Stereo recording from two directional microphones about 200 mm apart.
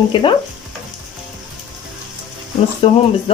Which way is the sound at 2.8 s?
25° left (ahead or behind).